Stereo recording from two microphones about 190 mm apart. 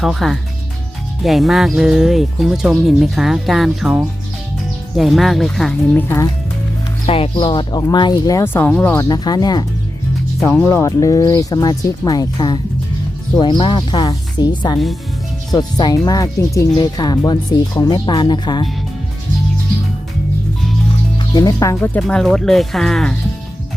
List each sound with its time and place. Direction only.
0.0 s speech: centre (ahead or behind)
7.1 s speech: 30° left (ahead or behind); by 9.0 s 10° left (ahead or behind)
9.0 s speech: 20° left (ahead or behind)
21.3 s speech: 20° left (ahead or behind)
22.0 s speech: centre (ahead or behind)